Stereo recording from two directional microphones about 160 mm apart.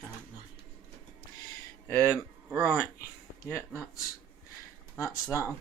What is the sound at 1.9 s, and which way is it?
Speech, 10° left (ahead or behind).